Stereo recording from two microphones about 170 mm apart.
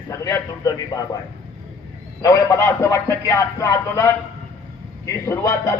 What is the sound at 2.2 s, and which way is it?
A man's voice, 20° left (ahead or behind).